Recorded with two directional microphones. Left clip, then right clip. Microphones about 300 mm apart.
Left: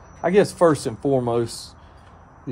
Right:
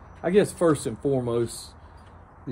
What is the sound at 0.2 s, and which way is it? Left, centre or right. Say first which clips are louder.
Speech: left 5 dB; centre.